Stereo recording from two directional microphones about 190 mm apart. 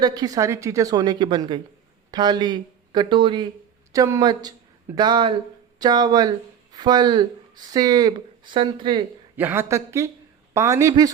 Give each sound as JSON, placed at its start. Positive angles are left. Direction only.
{"t": 0.0, "sound": "speech", "side_deg": -20}
{"t": 9.3, "sound": "speech", "side_deg": -10}